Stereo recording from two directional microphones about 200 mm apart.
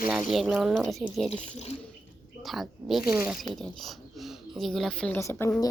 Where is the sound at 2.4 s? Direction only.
Centre (ahead or behind).